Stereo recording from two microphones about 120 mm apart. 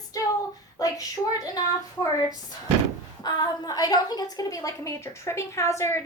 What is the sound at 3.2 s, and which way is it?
A woman's voice, 35° left (ahead or behind).